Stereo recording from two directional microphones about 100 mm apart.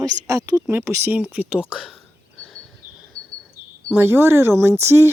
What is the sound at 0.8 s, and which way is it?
Speech, 25° right (ahead or behind).